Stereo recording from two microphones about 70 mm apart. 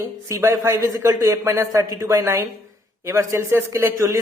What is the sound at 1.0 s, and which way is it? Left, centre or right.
A man's voice, right.